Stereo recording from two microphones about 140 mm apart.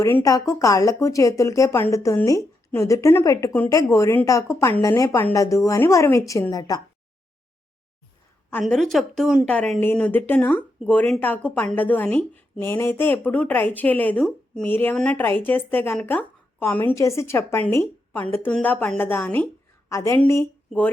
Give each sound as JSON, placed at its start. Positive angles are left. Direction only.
{"t": 0.0, "sound": "speech", "side_deg": 25}
{"t": 8.6, "sound": "a woman's voice", "side_deg": 0}
{"t": 9.8, "sound": "speech", "side_deg": 10}